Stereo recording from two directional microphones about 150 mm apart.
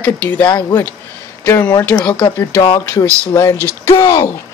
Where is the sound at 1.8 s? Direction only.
10° left (ahead or behind).